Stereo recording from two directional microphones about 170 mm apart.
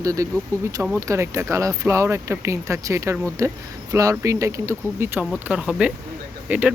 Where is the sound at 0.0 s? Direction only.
20° right (ahead or behind).